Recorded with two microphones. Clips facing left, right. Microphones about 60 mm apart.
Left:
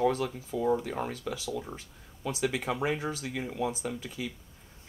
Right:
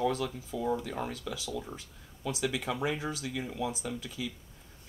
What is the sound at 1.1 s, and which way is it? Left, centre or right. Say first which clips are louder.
Speech: left 2 dB; left.